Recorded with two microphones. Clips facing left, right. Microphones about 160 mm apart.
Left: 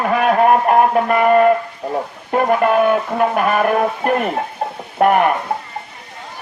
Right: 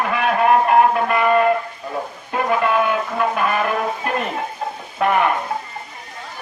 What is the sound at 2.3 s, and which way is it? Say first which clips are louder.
Music: left 4 dB; 50° left (ahead or behind).